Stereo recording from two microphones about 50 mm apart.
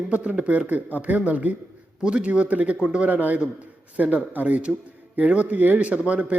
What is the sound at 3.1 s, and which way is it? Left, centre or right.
A man's voice, right.